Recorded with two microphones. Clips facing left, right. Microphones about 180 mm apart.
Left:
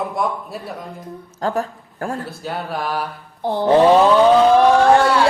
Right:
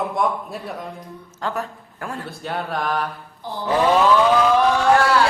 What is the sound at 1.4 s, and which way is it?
Speech, 40° left (ahead or behind).